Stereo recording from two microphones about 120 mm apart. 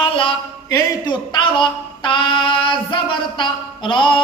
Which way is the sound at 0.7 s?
40° left (ahead or behind).